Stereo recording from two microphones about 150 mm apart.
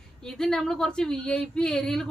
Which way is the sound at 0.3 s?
5° left (ahead or behind).